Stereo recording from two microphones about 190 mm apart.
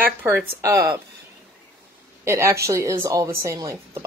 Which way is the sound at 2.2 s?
15° right (ahead or behind).